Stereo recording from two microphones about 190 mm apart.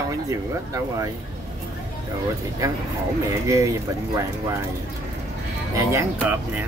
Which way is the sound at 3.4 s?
15° right (ahead or behind).